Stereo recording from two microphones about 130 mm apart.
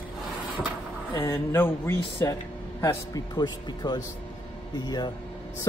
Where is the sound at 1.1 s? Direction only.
20° left (ahead or behind).